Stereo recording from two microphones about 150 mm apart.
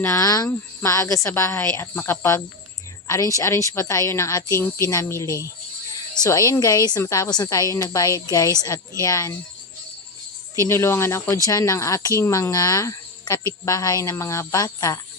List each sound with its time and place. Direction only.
0.0 s speech: 20° left (ahead or behind)
10.5 s speech: 20° left (ahead or behind)